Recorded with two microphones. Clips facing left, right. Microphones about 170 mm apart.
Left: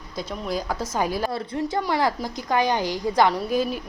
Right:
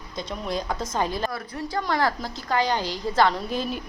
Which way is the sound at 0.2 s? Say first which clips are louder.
Left 1 dB; 5° left (ahead or behind).